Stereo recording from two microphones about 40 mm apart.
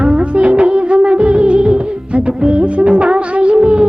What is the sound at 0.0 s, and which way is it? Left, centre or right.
Music of bollywood, right.